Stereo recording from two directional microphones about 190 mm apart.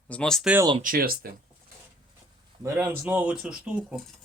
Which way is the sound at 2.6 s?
15° right (ahead or behind).